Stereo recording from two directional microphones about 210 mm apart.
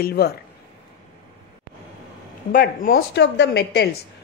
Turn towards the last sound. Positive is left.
turn(degrees=50)  # may be behind; listen again after turning